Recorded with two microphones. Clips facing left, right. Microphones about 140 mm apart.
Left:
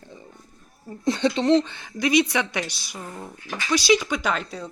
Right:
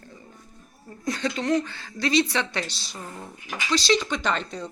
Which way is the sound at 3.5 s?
15° right (ahead or behind).